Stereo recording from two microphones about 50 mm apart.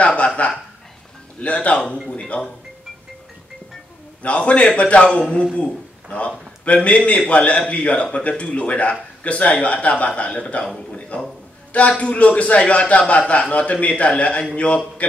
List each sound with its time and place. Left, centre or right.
0.0 s a man's voice: left
2.0 s dishes: left
4.2 s a man's voice: left